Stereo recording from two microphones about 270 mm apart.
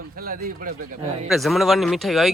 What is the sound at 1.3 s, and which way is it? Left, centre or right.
Speech, centre.